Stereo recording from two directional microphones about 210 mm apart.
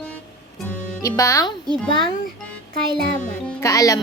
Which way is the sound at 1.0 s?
15° left (ahead or behind).